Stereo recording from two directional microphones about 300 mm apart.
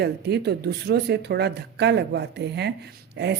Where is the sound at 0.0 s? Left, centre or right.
Right.